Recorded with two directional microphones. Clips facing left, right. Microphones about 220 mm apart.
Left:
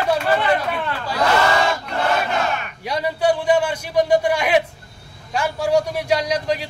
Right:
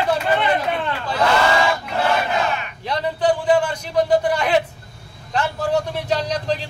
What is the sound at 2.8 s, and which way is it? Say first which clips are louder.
A man's voice: even; 10° left (ahead or behind).